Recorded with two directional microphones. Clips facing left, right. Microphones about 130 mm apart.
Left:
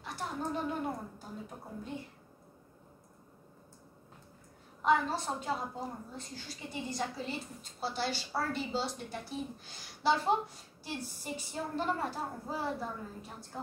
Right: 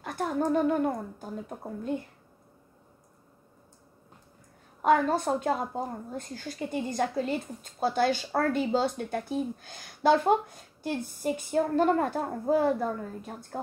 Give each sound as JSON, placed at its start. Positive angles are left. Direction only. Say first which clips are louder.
{"t": 0.0, "sound": "a woman's voice", "louder": "right 9 dB", "side_deg": -50}
{"t": 4.8, "sound": "a woman's voice", "louder": "right 6 dB", "side_deg": -50}